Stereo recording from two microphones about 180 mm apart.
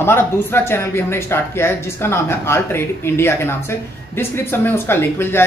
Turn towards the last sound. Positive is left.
turn(degrees=15)  # may be behind; listen again after turning